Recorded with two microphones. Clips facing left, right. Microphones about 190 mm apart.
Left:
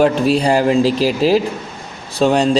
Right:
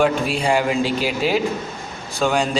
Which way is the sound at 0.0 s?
40° left (ahead or behind).